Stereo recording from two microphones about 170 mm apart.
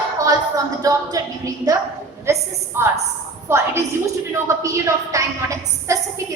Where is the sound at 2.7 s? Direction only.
15° right (ahead or behind).